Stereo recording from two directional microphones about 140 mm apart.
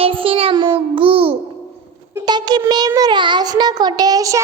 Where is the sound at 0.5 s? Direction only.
30° right (ahead or behind).